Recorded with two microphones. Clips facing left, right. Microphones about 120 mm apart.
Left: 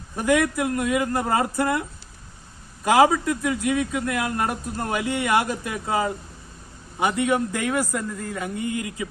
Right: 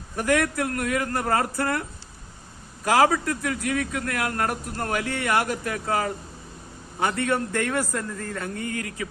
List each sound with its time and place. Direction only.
0.2 s speech: 20° left (ahead or behind)
2.8 s speech: 15° left (ahead or behind)